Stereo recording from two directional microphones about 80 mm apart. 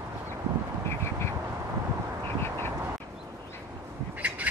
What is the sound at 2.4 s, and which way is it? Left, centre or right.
Duck, left.